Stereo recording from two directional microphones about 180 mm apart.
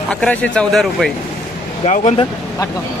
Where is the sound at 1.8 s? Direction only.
40° left (ahead or behind).